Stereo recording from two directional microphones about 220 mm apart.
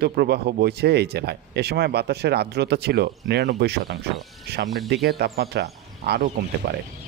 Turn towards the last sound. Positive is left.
turn(degrees=-45)  # may be behind; listen again after turning